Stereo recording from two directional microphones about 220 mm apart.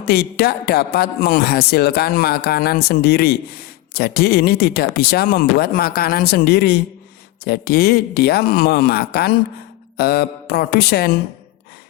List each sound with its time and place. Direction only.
0.0 s a man's voice: 45° left (ahead or behind)